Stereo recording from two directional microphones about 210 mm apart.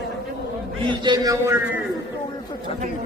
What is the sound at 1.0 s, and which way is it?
Speech, 20° right (ahead or behind).